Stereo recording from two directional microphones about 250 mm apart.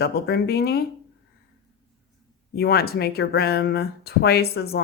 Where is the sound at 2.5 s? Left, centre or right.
Left.